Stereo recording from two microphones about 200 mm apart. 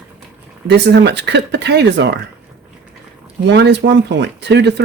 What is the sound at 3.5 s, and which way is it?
Speech, 60° right (ahead or behind).